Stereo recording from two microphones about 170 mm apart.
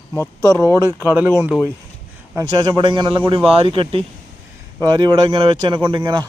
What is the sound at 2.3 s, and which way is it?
A man's voice, 20° right (ahead or behind).